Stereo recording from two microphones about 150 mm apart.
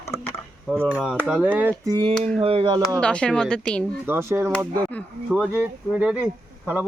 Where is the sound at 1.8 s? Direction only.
30° right (ahead or behind).